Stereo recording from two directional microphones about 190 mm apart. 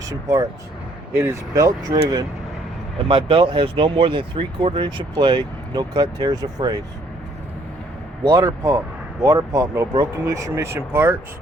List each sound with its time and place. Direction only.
0.1 s speech: 15° right (ahead or behind)
8.2 s speech: 20° right (ahead or behind)